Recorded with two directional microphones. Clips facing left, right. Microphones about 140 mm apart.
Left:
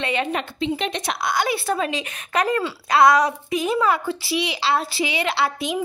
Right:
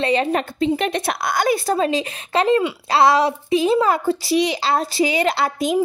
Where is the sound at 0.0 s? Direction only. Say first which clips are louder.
Right 5 dB; 35° right (ahead or behind).